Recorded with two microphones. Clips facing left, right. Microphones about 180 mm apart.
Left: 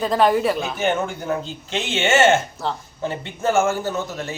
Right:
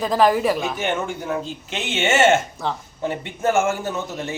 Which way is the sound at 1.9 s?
20° right (ahead or behind).